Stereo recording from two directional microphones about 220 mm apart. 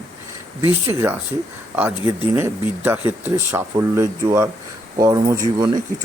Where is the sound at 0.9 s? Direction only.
10° right (ahead or behind).